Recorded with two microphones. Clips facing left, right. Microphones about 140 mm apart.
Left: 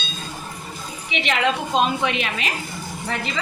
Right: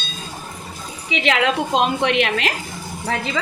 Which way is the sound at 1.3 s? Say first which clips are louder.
Right 3 dB; 90° right.